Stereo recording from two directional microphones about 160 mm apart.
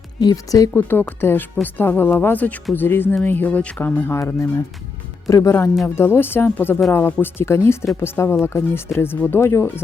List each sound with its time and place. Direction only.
0.2 s speech: 25° left (ahead or behind)